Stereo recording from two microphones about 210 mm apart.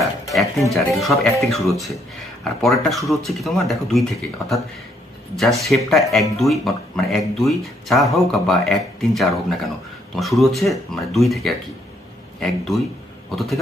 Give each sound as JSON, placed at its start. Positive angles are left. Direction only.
{"t": 0.0, "sound": "music", "side_deg": 0}
{"t": 0.7, "sound": "speech", "side_deg": 0}